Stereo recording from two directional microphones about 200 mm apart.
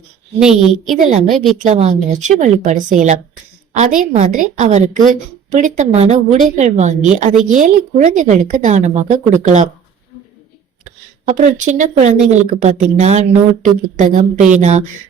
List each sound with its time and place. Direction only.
0.3 s a woman's voice: centre (ahead or behind)
1.6 s a woman's voice: 35° right (ahead or behind)
11.3 s a woman's voice: 35° right (ahead or behind)